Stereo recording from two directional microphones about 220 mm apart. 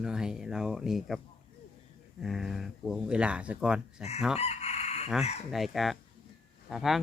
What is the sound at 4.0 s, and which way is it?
Speech, 30° left (ahead or behind).